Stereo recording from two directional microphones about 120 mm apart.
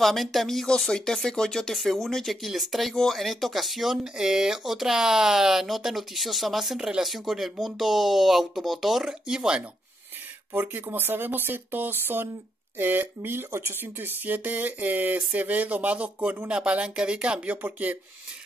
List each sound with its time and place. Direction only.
0.0 s speech: centre (ahead or behind)